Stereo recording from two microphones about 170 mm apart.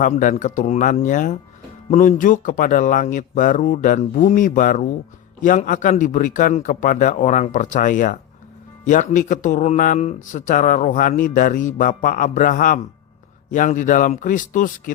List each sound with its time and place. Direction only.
0.0 s speech: 50° left (ahead or behind)